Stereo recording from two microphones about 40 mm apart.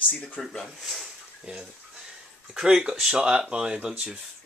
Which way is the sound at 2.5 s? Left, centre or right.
Centre.